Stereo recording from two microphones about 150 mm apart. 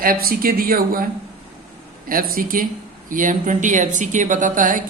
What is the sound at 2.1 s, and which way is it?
A woman's voice, 70° right (ahead or behind).